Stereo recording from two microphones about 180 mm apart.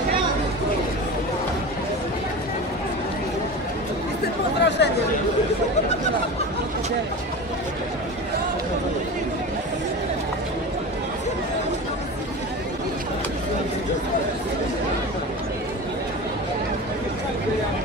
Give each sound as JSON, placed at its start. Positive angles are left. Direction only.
{"t": 4.6, "sound": "chatter", "side_deg": 70}